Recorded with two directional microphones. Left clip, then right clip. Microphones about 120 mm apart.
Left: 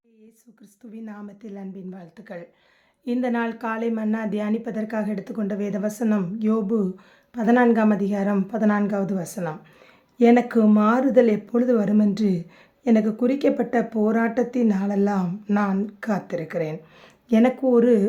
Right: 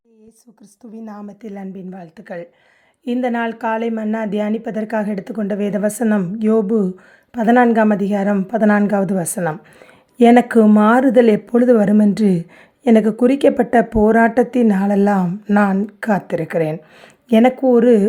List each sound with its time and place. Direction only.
0.8 s a woman's voice: 5° right (ahead or behind)
1.4 s speech: 45° right (ahead or behind)
5.5 s a woman's voice: 45° right (ahead or behind)
15.3 s a woman's voice: 35° right (ahead or behind)
17.2 s speech: 40° right (ahead or behind)